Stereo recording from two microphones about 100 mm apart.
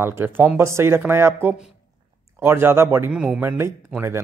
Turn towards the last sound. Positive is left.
turn(degrees=-25)  # may be behind; listen again after turning